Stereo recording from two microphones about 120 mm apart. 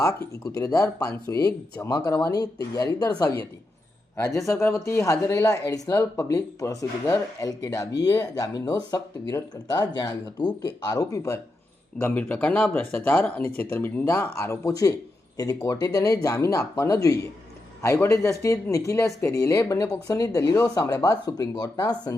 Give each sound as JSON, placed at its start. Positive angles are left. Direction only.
{"t": 0.0, "sound": "speech", "side_deg": 25}
{"t": 11.9, "sound": "speech", "side_deg": 15}